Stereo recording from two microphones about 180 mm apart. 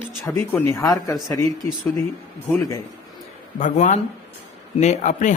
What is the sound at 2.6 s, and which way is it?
Speech, 20° left (ahead or behind).